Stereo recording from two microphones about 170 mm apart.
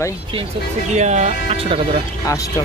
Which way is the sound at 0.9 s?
45° right (ahead or behind).